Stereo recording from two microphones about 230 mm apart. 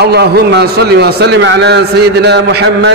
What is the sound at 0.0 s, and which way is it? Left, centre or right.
A man's voice, right.